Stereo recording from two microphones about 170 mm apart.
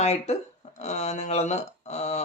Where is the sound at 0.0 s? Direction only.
40° left (ahead or behind).